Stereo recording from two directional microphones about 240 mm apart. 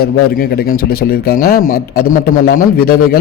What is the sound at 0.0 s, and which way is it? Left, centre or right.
A man's voice, left.